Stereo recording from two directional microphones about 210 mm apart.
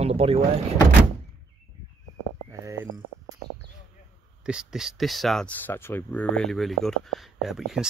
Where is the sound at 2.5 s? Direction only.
15° right (ahead or behind).